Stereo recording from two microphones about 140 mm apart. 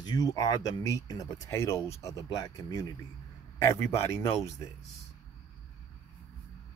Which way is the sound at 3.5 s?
20° left (ahead or behind).